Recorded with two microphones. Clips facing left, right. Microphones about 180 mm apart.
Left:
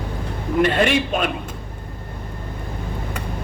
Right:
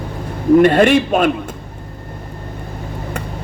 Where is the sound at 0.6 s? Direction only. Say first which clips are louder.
Right 4 dB; 45° right (ahead or behind).